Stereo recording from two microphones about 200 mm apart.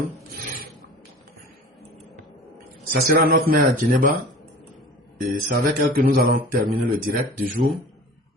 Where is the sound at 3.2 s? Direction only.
45° right (ahead or behind).